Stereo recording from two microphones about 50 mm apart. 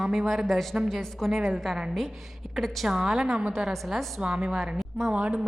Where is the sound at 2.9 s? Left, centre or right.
Centre.